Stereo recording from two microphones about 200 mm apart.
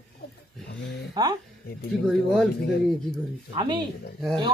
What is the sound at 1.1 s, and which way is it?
Speech, 20° right (ahead or behind).